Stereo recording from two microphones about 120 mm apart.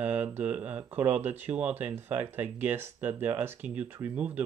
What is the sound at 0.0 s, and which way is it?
Speech, 15° right (ahead or behind).